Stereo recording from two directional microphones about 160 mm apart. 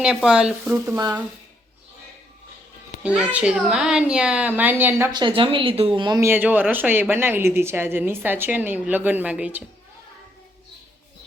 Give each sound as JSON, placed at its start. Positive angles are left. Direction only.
{"t": 0.0, "sound": "speech", "side_deg": -5}
{"t": 3.0, "sound": "speech", "side_deg": -10}
{"t": 5.1, "sound": "speech", "side_deg": -30}
{"t": 6.1, "sound": "speech", "side_deg": -15}